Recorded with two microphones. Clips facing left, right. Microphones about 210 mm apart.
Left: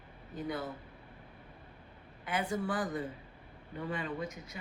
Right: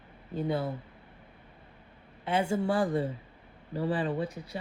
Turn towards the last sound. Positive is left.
turn(degrees=-30)  # may be behind; listen again after turning